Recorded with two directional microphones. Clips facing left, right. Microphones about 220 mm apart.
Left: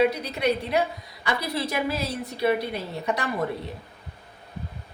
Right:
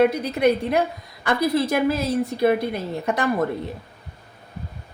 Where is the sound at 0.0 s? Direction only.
50° right (ahead or behind).